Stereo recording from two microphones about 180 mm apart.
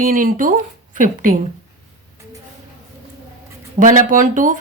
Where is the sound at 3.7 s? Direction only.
45° right (ahead or behind).